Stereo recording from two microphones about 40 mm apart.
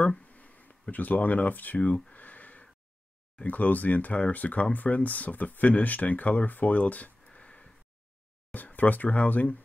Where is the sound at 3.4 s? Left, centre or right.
Left.